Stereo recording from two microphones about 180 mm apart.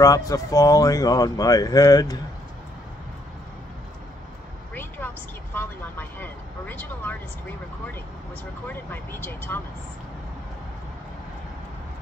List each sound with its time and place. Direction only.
0.0 s speech: 20° left (ahead or behind)
4.7 s vehicle: 10° left (ahead or behind)
8.6 s vehicle: 10° left (ahead or behind)